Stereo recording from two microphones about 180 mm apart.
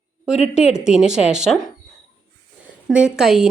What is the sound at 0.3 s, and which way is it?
A woman's voice, 5° right (ahead or behind).